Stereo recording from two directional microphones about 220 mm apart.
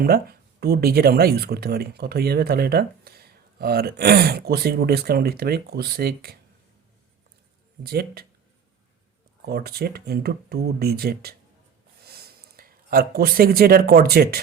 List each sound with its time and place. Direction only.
0.0 s speech: 45° right (ahead or behind)
7.9 s speech: 45° right (ahead or behind)
9.5 s speech: 45° right (ahead or behind)